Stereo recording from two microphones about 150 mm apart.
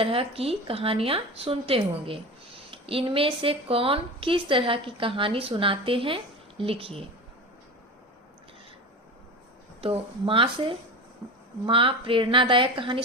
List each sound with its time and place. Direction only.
0.0 s a woman's voice: 40° right (ahead or behind)
9.8 s a woman's voice: 35° right (ahead or behind)